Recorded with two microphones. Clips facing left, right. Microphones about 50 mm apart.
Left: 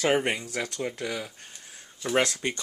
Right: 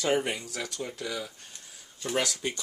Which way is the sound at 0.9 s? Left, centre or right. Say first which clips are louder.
Left 2 dB; left.